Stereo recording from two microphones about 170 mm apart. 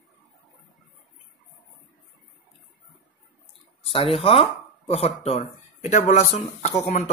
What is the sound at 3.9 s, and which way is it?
Speech, 35° left (ahead or behind).